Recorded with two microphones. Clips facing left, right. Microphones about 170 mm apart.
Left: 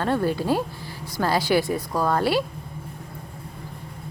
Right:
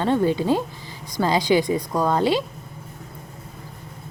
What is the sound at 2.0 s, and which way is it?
Speech, 20° right (ahead or behind).